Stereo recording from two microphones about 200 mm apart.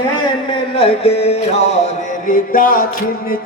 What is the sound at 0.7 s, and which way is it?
Music, 30° left (ahead or behind).